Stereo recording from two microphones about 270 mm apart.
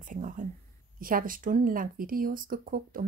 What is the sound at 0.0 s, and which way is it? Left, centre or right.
Speech, right.